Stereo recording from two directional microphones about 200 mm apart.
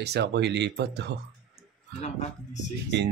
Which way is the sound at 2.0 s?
35° left (ahead or behind).